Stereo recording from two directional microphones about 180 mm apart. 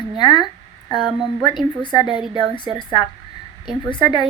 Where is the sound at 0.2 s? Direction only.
25° left (ahead or behind).